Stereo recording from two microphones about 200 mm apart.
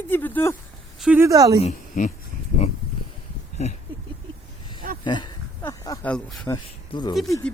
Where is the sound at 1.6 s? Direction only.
40° left (ahead or behind).